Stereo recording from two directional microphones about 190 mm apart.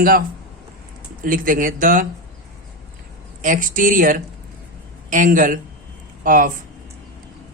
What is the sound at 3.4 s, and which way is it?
A woman's voice, 45° right (ahead or behind).